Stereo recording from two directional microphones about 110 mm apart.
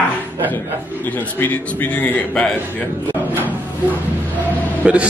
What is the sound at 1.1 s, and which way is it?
A man's voice, 15° left (ahead or behind).